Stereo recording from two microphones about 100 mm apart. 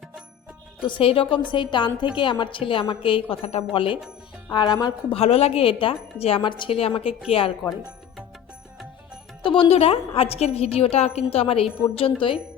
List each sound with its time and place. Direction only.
0.9 s a woman's voice: 60° left (ahead or behind)
4.5 s a woman's voice: 45° left (ahead or behind)
5.1 s speech: 90° left; by 6.4 s 75° left (ahead or behind)
6.4 s a woman's voice: 50° left (ahead or behind)
6.7 s speech: 70° left (ahead or behind)
9.4 s a woman's voice: 60° left (ahead or behind)